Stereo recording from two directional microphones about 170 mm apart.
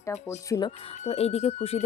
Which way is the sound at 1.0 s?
35° left (ahead or behind).